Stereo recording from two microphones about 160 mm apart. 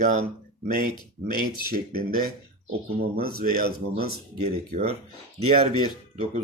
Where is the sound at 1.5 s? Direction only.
65° right (ahead or behind).